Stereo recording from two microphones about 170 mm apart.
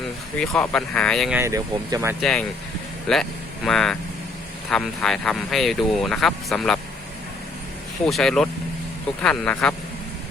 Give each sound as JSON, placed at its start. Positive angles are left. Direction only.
{"t": 0.3, "sound": "speech", "side_deg": 5}
{"t": 1.4, "sound": "speech", "side_deg": -15}
{"t": 3.1, "sound": "speech", "side_deg": 5}
{"t": 8.0, "sound": "speech", "side_deg": 5}